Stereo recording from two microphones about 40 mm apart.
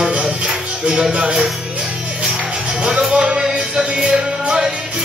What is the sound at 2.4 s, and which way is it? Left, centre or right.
Music, right.